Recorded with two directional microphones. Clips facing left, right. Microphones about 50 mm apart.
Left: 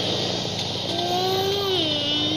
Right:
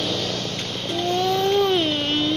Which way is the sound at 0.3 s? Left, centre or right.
Right.